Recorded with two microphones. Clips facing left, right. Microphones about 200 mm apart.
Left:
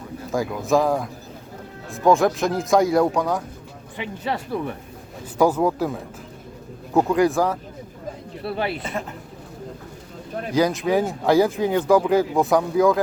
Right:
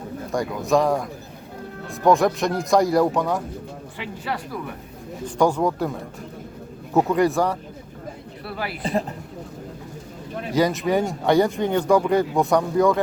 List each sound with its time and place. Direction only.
0.3 s speech: centre (ahead or behind)
3.9 s speech: 20° left (ahead or behind)
5.2 s speech: 5° left (ahead or behind)
8.4 s speech: 25° left (ahead or behind)
8.8 s speech: 35° right (ahead or behind)
10.5 s speech: centre (ahead or behind)